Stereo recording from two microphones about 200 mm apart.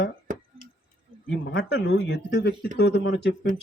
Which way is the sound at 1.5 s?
60° left (ahead or behind).